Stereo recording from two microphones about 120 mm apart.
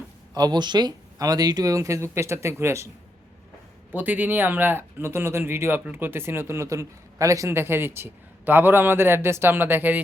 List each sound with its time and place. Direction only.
0.3 s speech: 35° right (ahead or behind)
3.9 s speech: 15° right (ahead or behind)